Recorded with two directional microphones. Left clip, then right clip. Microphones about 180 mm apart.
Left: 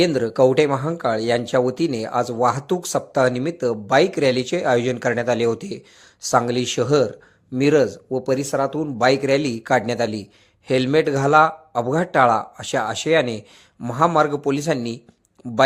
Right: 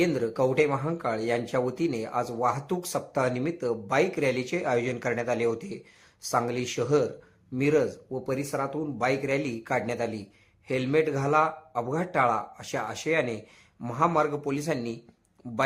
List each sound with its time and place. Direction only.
0.0 s speech: 25° left (ahead or behind)
15.4 s speech: 20° left (ahead or behind)